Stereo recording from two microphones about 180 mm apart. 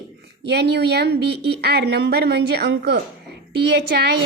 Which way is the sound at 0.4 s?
65° right (ahead or behind).